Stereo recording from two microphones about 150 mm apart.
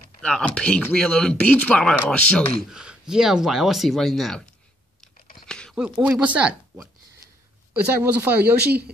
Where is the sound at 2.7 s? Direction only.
5° right (ahead or behind).